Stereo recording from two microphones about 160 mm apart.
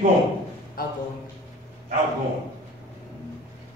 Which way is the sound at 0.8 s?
65° left (ahead or behind).